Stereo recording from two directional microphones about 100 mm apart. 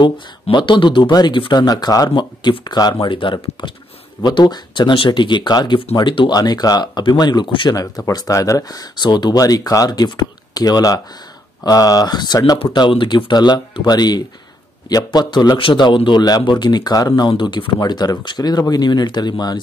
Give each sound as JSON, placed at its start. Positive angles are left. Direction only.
{"t": 0.0, "sound": "speech", "side_deg": 50}
{"t": 2.0, "sound": "speech", "side_deg": 55}
{"t": 7.7, "sound": "speech", "side_deg": 35}